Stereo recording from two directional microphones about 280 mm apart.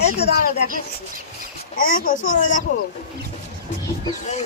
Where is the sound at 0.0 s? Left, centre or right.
Left.